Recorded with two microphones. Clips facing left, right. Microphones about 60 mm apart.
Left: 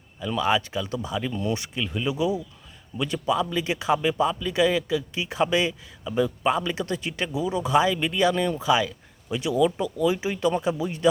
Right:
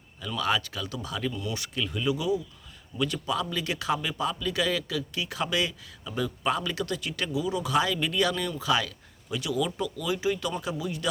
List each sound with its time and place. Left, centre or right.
0.3 s speech: left
1.3 s speech: left